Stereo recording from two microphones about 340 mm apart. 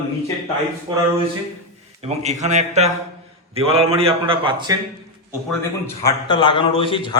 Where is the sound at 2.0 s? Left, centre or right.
Centre.